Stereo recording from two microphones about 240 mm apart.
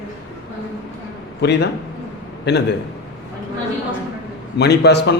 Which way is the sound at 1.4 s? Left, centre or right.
Left.